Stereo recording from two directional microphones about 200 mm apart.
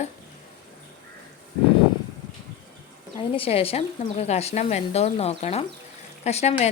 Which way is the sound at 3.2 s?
30° left (ahead or behind).